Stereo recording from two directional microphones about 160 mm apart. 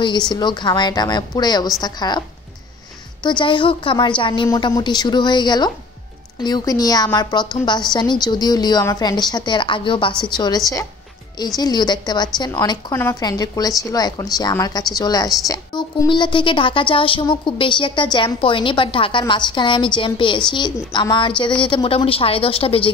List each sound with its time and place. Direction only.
0.3 s a woman's voice: 30° left (ahead or behind)
3.3 s a woman's voice: 30° left (ahead or behind)